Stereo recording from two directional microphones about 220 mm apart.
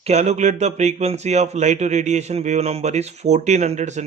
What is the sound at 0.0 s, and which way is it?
Speech, 30° right (ahead or behind).